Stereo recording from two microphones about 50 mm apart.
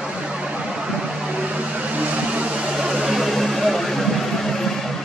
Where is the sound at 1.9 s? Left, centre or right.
Right.